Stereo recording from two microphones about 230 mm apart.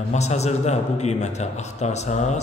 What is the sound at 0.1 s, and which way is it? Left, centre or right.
A man's voice, left.